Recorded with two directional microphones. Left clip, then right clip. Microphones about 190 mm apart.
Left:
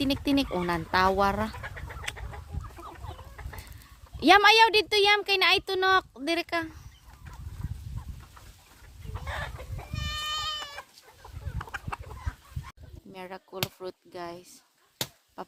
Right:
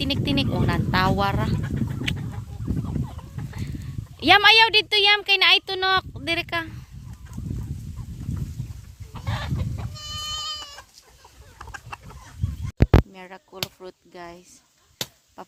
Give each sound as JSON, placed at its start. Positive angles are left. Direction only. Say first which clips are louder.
{"t": 0.0, "sound": "a woman's voice", "louder": "right 2 dB", "side_deg": 0}
{"t": 1.6, "sound": "bird", "louder": "right 7 dB", "side_deg": -65}
{"t": 4.2, "sound": "a woman's voice", "louder": "right 3 dB", "side_deg": 0}
{"t": 9.1, "sound": "chicken", "louder": "right 3 dB", "side_deg": -55}
{"t": 10.0, "sound": "goat", "louder": "right 1 dB", "side_deg": 10}
{"t": 11.6, "sound": "chicken", "louder": "left 1 dB", "side_deg": 10}
{"t": 13.1, "sound": "speech", "louder": "right 1 dB", "side_deg": 0}
{"t": 15.0, "sound": "chop", "louder": "right 3 dB", "side_deg": 5}
{"t": 15.4, "sound": "a sound", "louder": "even", "side_deg": -5}